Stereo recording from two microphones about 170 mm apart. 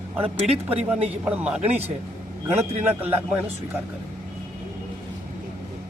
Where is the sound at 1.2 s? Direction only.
10° right (ahead or behind).